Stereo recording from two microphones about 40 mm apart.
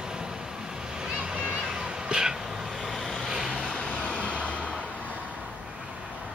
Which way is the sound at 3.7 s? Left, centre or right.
Left.